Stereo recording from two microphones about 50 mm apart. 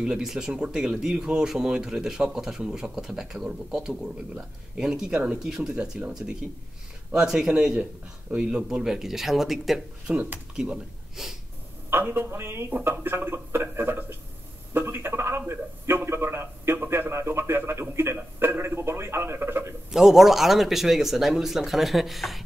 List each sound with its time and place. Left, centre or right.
0.2 s speech: centre
11.9 s a man's voice: right
18.1 s a man's voice: right
19.9 s speech: centre